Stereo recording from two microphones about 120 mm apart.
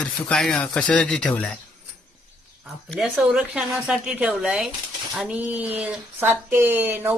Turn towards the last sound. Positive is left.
turn(degrees=-15)  # may be behind; listen again after turning